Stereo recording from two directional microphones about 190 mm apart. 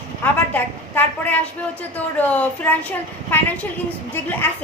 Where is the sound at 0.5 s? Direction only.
10° left (ahead or behind).